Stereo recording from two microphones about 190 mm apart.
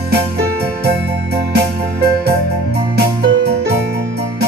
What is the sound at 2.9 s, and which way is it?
Music, 60° right (ahead or behind).